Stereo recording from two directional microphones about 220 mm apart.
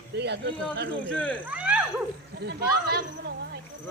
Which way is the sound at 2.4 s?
45° right (ahead or behind).